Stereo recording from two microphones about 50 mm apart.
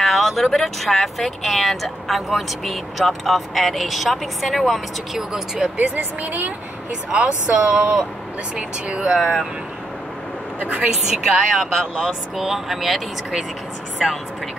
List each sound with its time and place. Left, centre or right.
0.0 s speech: centre
5.8 s speech: right
6.9 s speech: centre
9.2 s speech: centre
10.6 s speech: right
11.1 s a woman's voice: centre